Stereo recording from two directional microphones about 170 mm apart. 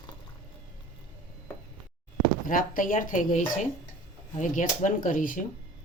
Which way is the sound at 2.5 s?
55° left (ahead or behind).